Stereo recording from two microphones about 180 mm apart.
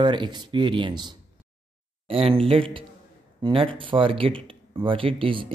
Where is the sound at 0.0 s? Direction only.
25° right (ahead or behind).